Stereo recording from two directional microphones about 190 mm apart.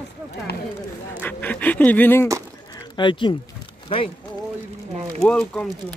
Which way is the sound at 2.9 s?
25° left (ahead or behind).